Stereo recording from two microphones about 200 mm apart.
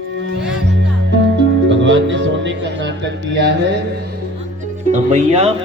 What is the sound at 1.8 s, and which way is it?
Music, 65° right (ahead or behind).